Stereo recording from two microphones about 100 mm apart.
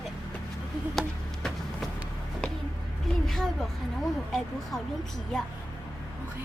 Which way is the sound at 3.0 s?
5° left (ahead or behind).